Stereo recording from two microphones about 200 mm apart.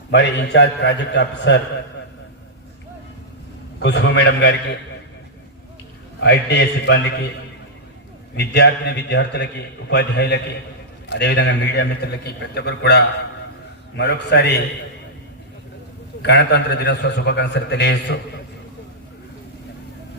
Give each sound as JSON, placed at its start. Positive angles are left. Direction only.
{"t": 0.1, "sound": "a man's voice", "side_deg": 60}
{"t": 3.8, "sound": "a man's voice", "side_deg": 60}
{"t": 6.1, "sound": "a man's voice", "side_deg": 55}
{"t": 8.4, "sound": "a man's voice", "side_deg": 55}
{"t": 16.2, "sound": "a man's voice", "side_deg": 60}